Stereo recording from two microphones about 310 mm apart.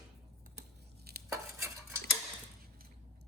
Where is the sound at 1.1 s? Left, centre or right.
Right.